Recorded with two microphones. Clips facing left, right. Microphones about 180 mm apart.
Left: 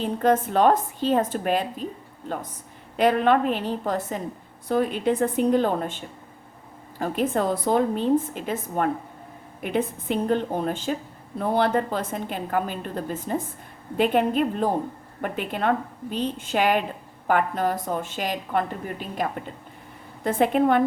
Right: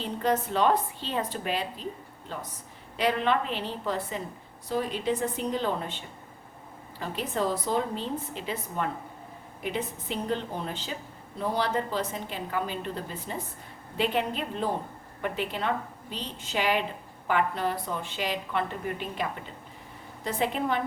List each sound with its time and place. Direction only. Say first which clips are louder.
0.0 s a woman's voice: left 6 dB; 50° left (ahead or behind)
3.0 s a woman's voice: left 7 dB; 50° left (ahead or behind)
7.0 s a woman's voice: left 6 dB; 55° left (ahead or behind)
20.2 s a woman's voice: left 8 dB; 55° left (ahead or behind)